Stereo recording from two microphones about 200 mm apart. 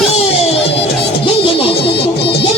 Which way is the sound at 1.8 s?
55° left (ahead or behind).